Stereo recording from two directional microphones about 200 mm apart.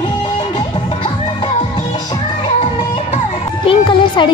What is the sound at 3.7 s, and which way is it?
Music, 25° left (ahead or behind).